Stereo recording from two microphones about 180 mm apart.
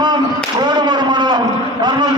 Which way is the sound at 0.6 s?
25° right (ahead or behind).